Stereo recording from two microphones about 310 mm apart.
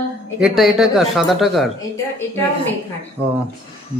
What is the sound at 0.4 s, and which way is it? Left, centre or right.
A man's voice, centre.